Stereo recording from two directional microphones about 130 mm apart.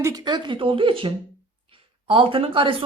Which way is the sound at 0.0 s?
30° right (ahead or behind).